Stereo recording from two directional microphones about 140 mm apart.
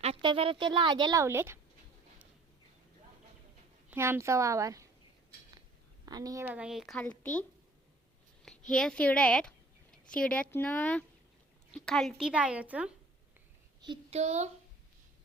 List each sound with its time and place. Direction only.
0.0 s speech: 40° right (ahead or behind)
1.2 s a woman's voice: 20° right (ahead or behind)
3.8 s a woman's voice: 15° right (ahead or behind)
6.1 s a woman's voice: 25° right (ahead or behind)
6.4 s speech: 10° right (ahead or behind)
6.9 s speech: 10° left (ahead or behind)
8.4 s a woman's voice: 5° left (ahead or behind); by 12.9 s 10° right (ahead or behind)
14.1 s speech: 50° right (ahead or behind)